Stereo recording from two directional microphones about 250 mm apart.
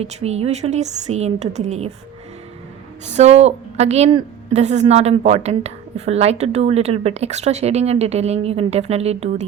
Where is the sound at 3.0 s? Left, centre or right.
Right.